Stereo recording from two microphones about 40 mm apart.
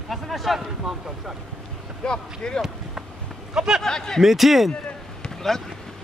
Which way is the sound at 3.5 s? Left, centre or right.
Centre.